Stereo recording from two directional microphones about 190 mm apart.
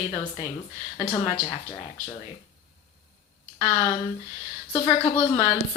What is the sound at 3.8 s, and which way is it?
Speech, 25° left (ahead or behind).